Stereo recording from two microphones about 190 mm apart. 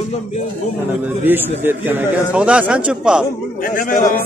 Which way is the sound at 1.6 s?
10° right (ahead or behind).